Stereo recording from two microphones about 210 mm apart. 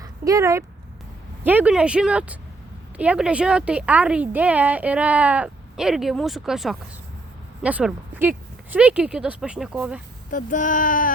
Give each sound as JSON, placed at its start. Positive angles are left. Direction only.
{"t": 0.0, "sound": "a sound", "side_deg": -15}
{"t": 1.5, "sound": "a woman's voice", "side_deg": -5}
{"t": 10.3, "sound": "speech", "side_deg": 40}